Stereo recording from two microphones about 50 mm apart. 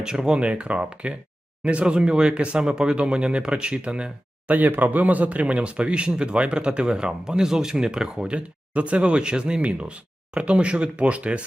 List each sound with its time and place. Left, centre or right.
0.0 s speech: centre
4.5 s speech: right